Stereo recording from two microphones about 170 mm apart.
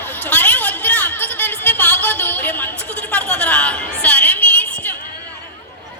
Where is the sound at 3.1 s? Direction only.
10° left (ahead or behind).